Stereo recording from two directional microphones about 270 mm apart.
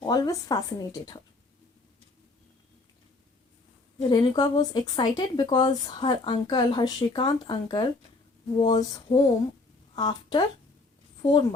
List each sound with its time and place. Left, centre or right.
0.0 s speech: centre
3.9 s speech: centre